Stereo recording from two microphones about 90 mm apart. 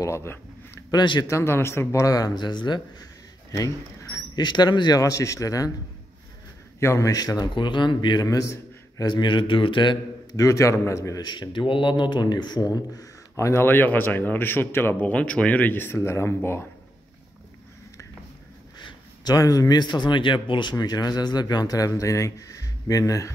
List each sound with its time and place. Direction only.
0.0 s speech: 30° left (ahead or behind)
0.9 s speech: 60° left (ahead or behind)
1.3 s speech: 30° left (ahead or behind); by 3.1 s 55° left (ahead or behind)
3.5 s mouse: 40° left (ahead or behind)
4.5 s speech: 55° left (ahead or behind); by 5.7 s 40° left (ahead or behind)
6.8 s a man's voice: 35° left (ahead or behind)
8.5 s a sound: 40° left (ahead or behind)
9.1 s speech: 65° left (ahead or behind)
10.3 s speech: 35° left (ahead or behind)
11.2 s speech: 55° left (ahead or behind); by 16.3 s 30° left (ahead or behind)
18.8 s a man's voice: 55° left (ahead or behind)
20.7 s speech: 45° left (ahead or behind)